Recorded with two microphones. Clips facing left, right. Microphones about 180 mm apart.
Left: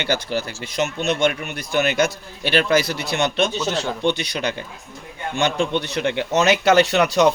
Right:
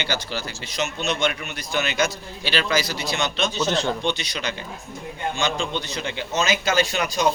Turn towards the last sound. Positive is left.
turn(degrees=70)  # may be behind; listen again after turning